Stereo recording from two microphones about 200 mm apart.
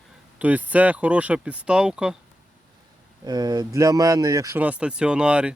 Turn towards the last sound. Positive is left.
turn(degrees=-5)  # may be behind; listen again after turning